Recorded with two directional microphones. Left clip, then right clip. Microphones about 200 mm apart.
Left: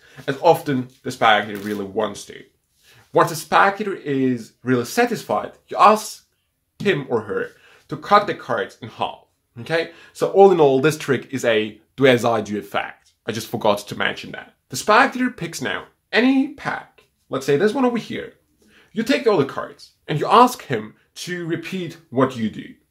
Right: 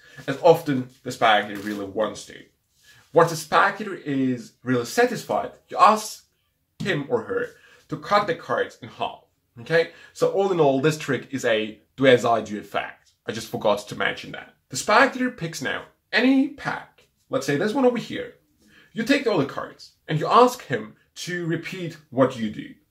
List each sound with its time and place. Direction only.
0.2 s speech: 40° left (ahead or behind)